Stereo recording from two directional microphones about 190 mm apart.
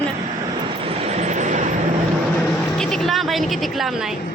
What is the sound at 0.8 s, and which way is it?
Vehicle, 30° right (ahead or behind).